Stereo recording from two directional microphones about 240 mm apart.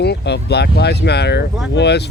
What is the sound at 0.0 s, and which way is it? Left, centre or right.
Speech, left.